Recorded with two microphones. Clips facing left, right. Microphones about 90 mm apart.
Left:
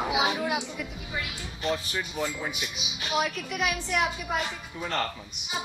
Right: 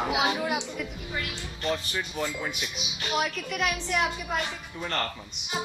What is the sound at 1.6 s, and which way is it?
A woman's voice, 5° left (ahead or behind).